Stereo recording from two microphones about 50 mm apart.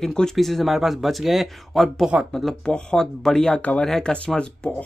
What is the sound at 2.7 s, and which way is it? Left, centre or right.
Speech, centre.